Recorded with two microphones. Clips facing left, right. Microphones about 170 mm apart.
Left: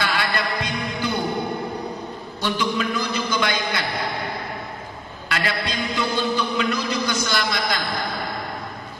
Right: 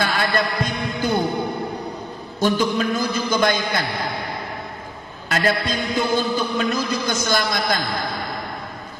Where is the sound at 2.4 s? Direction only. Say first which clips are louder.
Right 5 dB; 45° right (ahead or behind).